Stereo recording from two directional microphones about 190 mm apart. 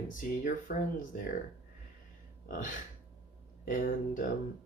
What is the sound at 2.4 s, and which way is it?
Speech, 45° left (ahead or behind).